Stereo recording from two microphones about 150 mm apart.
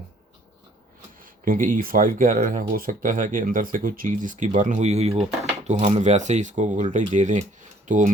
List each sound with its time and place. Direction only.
1.2 s speech: 70° right (ahead or behind)